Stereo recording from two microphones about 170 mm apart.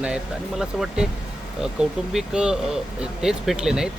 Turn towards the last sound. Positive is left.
turn(degrees=-5)  # may be behind; listen again after turning